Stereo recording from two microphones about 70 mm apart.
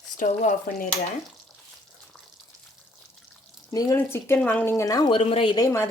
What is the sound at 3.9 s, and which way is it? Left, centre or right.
Speech, left.